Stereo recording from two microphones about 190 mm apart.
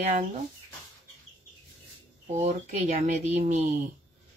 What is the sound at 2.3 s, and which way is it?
Speech, 35° right (ahead or behind).